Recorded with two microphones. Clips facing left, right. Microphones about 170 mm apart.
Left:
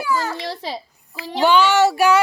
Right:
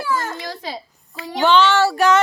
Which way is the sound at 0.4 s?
30° left (ahead or behind).